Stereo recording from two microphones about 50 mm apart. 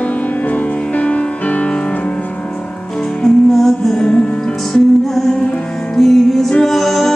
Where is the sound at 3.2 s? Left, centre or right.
Centre.